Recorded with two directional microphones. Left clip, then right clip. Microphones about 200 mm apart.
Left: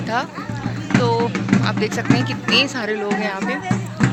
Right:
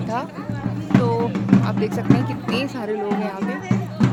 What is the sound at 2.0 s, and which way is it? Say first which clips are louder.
Speech: left 2 dB; 35° left (ahead or behind).